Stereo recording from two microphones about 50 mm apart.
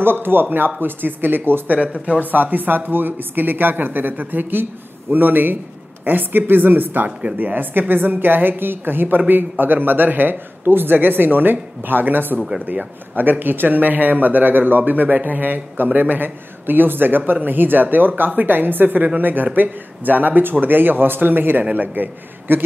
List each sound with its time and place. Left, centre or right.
0.0 s speech: right
1.8 s speech: right
7.1 s speech: right
7.3 s a man's voice: right